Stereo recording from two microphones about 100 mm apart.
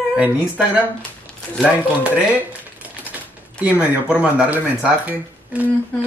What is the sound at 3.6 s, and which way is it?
Speech, 15° right (ahead or behind).